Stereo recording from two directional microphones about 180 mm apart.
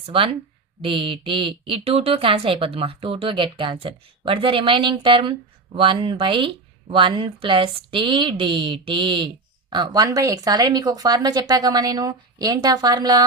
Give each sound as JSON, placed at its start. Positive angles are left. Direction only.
{"t": 0.0, "sound": "speech", "side_deg": -30}